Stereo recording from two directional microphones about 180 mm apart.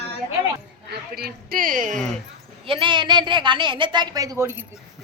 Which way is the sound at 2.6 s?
25° right (ahead or behind).